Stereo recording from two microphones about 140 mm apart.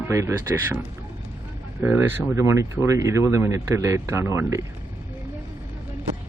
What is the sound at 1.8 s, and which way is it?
Speech, 15° right (ahead or behind).